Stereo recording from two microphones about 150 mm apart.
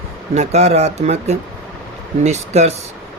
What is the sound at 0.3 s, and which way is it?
Speech, 45° right (ahead or behind).